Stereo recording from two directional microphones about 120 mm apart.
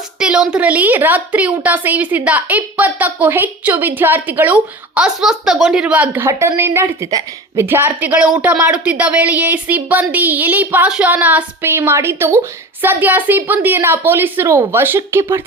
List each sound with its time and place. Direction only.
0.2 s a woman's voice: 5° right (ahead or behind); by 15.4 s 20° right (ahead or behind)